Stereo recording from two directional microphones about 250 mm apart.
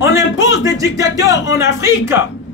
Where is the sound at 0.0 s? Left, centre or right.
Left.